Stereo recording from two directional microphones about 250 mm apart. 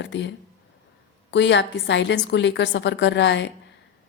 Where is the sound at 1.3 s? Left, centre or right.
Left.